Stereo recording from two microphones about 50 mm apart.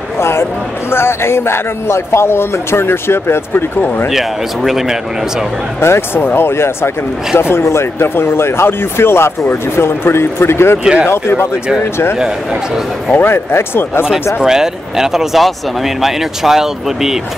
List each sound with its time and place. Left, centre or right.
0.2 s a man's voice: left
4.1 s speech: centre
5.8 s a man's voice: left
10.8 s speech: centre
11.1 s a man's voice: left
13.1 s speech: left
14.4 s speech: centre